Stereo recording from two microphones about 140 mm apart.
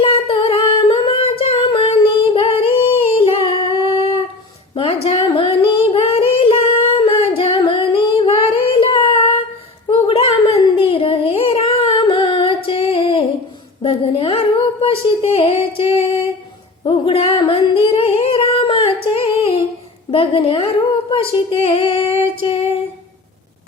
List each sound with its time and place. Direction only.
0.0 s humming: 40° left (ahead or behind)
4.7 s singing: 45° left (ahead or behind)
9.9 s a sound: 40° left (ahead or behind)
16.8 s singing: 45° left (ahead or behind)
20.1 s a sound: 40° left (ahead or behind)
21.1 s female singing: 40° left (ahead or behind)